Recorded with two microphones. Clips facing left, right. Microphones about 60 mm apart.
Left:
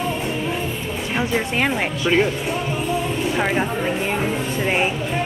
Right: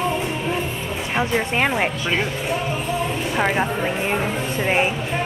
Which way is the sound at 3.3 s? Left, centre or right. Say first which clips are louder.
Right 3 dB; centre.